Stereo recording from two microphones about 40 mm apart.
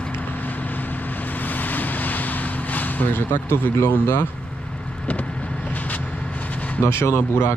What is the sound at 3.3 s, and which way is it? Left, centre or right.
Speech, left.